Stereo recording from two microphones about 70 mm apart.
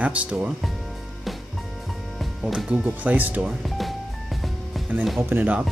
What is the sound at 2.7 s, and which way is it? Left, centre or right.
Speech, right.